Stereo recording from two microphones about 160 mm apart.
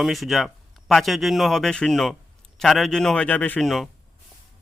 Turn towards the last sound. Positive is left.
turn(degrees=0)  # may be behind; listen again after turning